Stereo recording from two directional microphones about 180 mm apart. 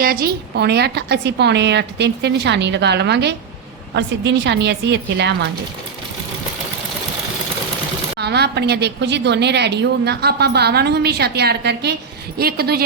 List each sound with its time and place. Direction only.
0.0 s a woman's voice: 55° right (ahead or behind); by 5.5 s 75° right (ahead or behind)
8.2 s a woman's voice: 65° right (ahead or behind)